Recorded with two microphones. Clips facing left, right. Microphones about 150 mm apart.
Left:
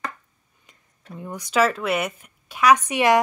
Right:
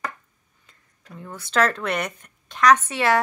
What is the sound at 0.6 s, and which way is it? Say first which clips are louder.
Speech: left 3 dB; 15° left (ahead or behind).